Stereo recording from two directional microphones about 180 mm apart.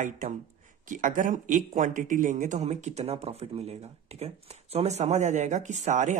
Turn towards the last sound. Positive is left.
turn(degrees=-40)  # may be behind; listen again after turning